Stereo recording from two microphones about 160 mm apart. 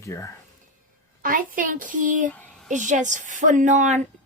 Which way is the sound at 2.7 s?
50° right (ahead or behind).